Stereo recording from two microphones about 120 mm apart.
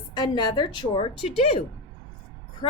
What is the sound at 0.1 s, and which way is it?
Speech, 40° left (ahead or behind).